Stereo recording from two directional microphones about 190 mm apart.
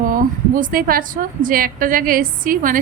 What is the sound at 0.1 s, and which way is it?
A woman's voice, 45° right (ahead or behind).